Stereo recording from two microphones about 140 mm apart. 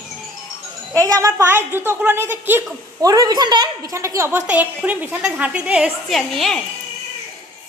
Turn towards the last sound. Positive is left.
turn(degrees=0)  # may be behind; listen again after turning